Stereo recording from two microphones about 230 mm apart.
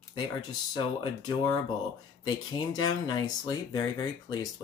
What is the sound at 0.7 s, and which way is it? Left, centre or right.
Speech, centre.